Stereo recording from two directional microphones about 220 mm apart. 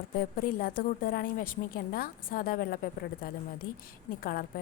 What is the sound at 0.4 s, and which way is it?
A woman's voice, 40° left (ahead or behind).